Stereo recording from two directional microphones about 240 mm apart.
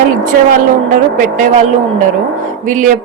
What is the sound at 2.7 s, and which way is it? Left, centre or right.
Speech, right.